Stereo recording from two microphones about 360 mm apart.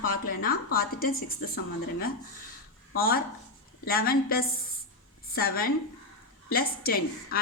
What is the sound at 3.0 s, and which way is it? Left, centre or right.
A woman's voice, left.